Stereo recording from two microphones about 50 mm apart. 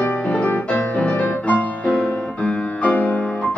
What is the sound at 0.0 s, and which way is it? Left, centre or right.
Music, left.